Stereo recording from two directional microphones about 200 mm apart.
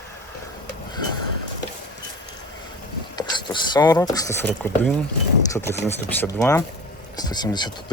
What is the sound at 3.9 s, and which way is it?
Speech, 10° left (ahead or behind).